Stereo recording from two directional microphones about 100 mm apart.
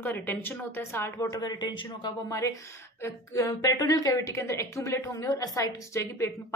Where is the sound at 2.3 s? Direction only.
30° left (ahead or behind).